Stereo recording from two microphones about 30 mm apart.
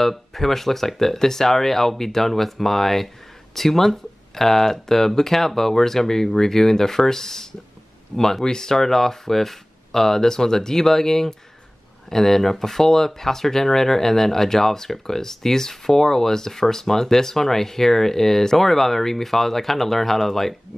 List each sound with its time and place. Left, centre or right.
0.1 s speech: centre